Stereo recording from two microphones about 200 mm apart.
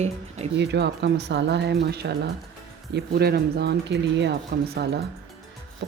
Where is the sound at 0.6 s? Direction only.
60° right (ahead or behind).